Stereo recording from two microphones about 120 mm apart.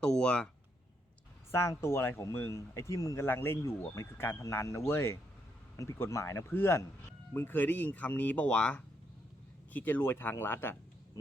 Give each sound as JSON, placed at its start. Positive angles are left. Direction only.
{"t": 0.0, "sound": "speech", "side_deg": 5}
{"t": 1.5, "sound": "speech", "side_deg": 25}